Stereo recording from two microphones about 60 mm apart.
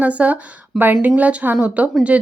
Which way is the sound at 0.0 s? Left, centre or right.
Right.